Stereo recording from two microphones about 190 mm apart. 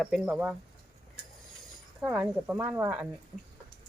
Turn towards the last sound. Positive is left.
turn(degrees=-10)  # may be behind; listen again after turning